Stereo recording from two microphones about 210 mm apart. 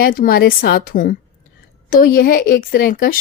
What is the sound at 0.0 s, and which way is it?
A woman's voice, 45° left (ahead or behind).